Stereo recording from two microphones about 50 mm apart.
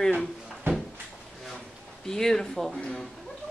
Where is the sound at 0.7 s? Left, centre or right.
Right.